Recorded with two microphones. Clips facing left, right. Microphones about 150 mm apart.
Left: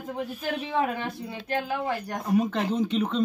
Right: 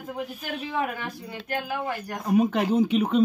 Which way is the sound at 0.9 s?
25° left (ahead or behind).